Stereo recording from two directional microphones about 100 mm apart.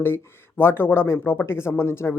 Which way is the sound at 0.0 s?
25° left (ahead or behind).